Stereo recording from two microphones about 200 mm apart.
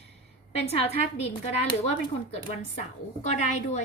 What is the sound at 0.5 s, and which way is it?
Speech, 30° left (ahead or behind).